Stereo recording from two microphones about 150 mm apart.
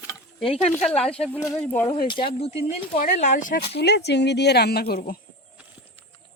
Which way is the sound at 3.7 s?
90° left.